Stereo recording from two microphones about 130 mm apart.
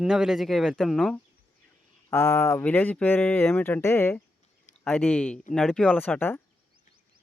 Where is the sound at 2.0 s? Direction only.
20° left (ahead or behind).